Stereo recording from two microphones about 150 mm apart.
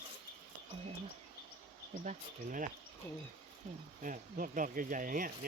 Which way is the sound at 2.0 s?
55° right (ahead or behind).